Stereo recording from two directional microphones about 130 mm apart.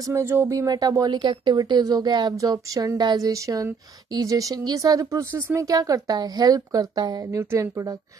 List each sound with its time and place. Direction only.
0.0 s speech: 20° right (ahead or behind)